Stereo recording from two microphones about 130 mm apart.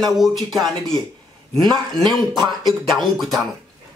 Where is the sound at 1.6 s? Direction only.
35° right (ahead or behind).